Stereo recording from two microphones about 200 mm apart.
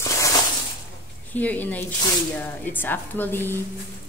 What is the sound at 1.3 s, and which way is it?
Speech, 10° left (ahead or behind).